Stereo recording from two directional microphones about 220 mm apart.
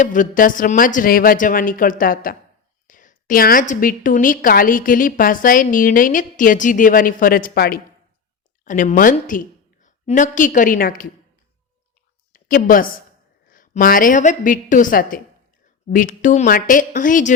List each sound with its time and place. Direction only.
0.0 s a woman's voice: 35° left (ahead or behind)
12.3 s a woman's voice: 40° left (ahead or behind)